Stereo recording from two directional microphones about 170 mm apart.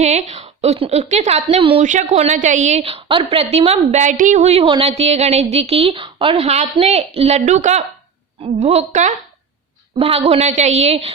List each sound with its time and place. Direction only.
0.0 s a woman's voice: 40° right (ahead or behind)